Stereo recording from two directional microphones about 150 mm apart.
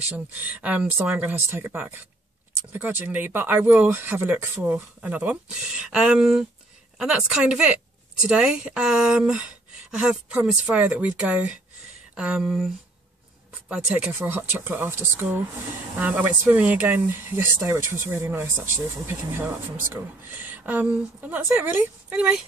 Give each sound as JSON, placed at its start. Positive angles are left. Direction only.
{"t": 0.4, "sound": "speech", "side_deg": -10}
{"t": 19.9, "sound": "speech", "side_deg": -15}